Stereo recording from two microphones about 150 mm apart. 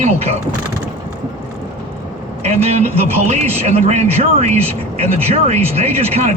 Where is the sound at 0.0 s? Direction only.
45° right (ahead or behind).